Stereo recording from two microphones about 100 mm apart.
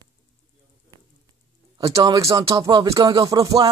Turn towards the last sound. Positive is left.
turn(degrees=-35)  # may be behind; listen again after turning